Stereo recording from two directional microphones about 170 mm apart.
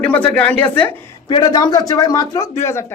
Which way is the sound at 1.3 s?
25° left (ahead or behind).